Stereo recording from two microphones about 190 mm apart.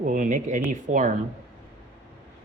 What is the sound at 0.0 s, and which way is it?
Speech, 45° right (ahead or behind).